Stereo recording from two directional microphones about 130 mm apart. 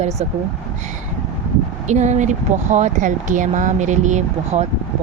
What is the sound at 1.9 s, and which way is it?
Speech, 65° right (ahead or behind).